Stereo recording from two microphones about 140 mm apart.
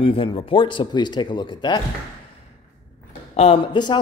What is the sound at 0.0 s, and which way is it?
Speech, 40° left (ahead or behind).